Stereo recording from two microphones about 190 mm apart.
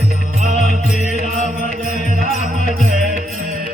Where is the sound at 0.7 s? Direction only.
40° right (ahead or behind).